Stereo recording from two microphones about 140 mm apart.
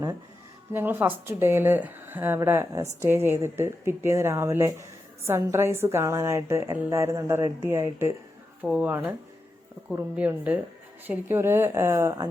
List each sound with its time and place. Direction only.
0.7 s speech: 15° right (ahead or behind)
8.6 s speech: 5° right (ahead or behind)